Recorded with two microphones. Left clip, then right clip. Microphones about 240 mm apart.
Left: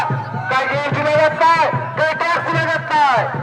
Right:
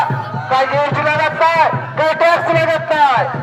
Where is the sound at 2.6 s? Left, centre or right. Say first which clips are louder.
Right 3 dB; left.